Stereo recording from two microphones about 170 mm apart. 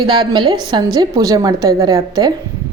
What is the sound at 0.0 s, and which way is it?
Speech, 30° right (ahead or behind).